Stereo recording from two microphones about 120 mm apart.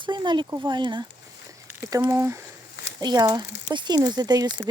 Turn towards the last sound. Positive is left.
turn(degrees=-30)  # may be behind; listen again after turning